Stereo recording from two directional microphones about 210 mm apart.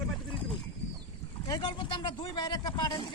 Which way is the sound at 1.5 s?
20° left (ahead or behind).